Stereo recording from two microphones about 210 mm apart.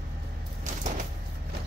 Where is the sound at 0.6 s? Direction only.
35° right (ahead or behind).